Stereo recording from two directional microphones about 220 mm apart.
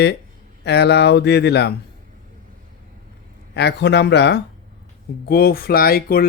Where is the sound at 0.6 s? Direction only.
50° left (ahead or behind).